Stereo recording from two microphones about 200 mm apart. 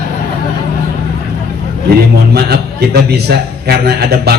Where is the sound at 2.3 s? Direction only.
50° right (ahead or behind).